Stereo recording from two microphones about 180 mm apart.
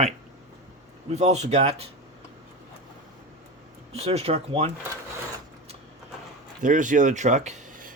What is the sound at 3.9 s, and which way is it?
Speech, 35° right (ahead or behind).